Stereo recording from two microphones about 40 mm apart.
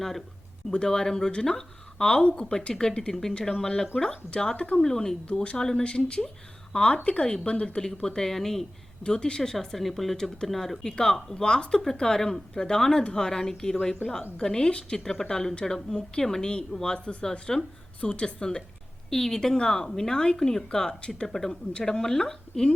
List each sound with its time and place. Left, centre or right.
0.7 s speech: centre
3.1 s speech: centre
4.5 s speech: left
4.8 s speech: centre
5.2 s speech: left
5.5 s speech: centre
5.8 s speech: left
7.8 s speech: centre
9.0 s speech: left
14.6 s speech: left
14.9 s speech: centre
17.5 s speech: centre
18.0 s speech: left
19.1 s speech: centre